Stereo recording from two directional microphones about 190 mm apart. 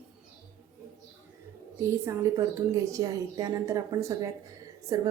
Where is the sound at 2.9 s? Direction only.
15° right (ahead or behind).